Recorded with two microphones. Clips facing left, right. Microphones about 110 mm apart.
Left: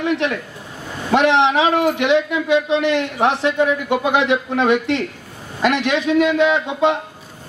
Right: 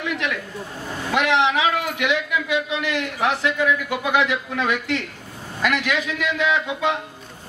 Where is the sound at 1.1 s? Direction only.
30° left (ahead or behind).